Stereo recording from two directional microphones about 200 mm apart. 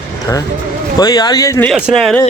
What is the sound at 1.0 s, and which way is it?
Speech, 20° left (ahead or behind).